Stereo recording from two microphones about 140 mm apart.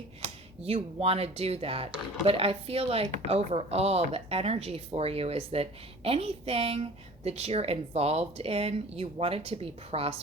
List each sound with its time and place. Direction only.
0.2 s a woman's voice: 45° right (ahead or behind)